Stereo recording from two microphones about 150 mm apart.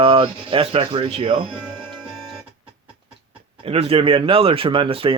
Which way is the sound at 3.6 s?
40° right (ahead or behind).